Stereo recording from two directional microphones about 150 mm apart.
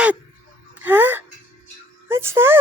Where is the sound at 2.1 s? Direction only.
15° right (ahead or behind).